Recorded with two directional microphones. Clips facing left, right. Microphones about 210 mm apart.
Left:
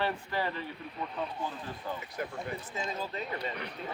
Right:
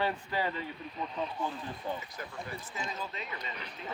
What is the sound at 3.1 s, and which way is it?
Speech, 35° left (ahead or behind).